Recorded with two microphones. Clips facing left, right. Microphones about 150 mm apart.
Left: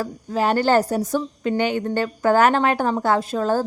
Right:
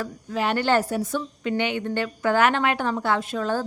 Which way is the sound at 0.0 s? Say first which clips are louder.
Left 4 dB; 35° left (ahead or behind).